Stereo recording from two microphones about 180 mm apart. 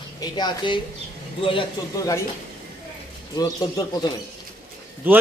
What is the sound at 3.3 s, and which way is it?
Speech, 20° left (ahead or behind).